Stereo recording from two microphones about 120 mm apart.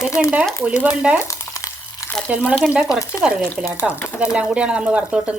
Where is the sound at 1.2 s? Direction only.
25° left (ahead or behind).